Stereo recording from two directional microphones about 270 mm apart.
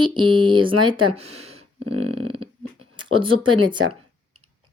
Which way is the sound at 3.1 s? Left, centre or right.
Centre.